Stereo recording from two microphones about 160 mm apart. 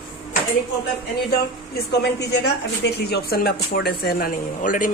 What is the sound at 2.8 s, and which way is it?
Speech, 90° left.